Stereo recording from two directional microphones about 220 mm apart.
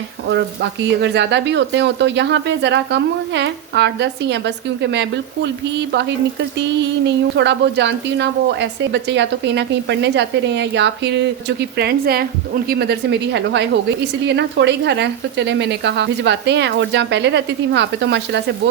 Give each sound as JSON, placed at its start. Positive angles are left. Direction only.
{"t": 0.3, "sound": "speech", "side_deg": -55}
{"t": 7.3, "sound": "speech", "side_deg": -50}